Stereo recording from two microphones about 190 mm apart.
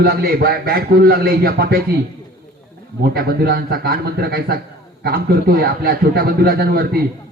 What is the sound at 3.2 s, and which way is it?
A man's voice, 55° right (ahead or behind).